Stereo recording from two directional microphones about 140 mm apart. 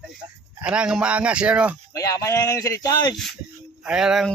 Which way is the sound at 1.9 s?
20° left (ahead or behind).